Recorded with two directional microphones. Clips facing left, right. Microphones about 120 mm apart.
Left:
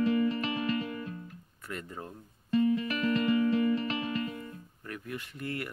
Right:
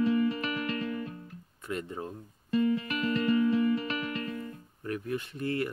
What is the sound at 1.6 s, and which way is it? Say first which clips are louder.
Speech: right 5 dB; 20° right (ahead or behind).